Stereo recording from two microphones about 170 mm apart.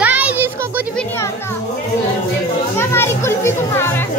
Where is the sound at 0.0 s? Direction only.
10° right (ahead or behind).